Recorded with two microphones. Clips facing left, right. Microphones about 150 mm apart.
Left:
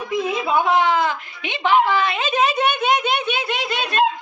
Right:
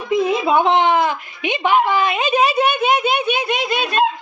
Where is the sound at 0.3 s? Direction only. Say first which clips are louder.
Right 2 dB; 25° right (ahead or behind).